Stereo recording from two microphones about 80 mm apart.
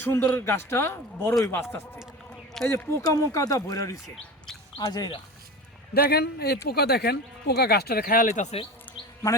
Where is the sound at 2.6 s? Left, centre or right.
Left.